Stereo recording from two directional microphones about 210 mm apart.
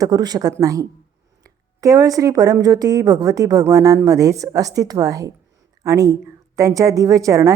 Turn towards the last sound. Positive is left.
turn(degrees=-15)  # may be behind; listen again after turning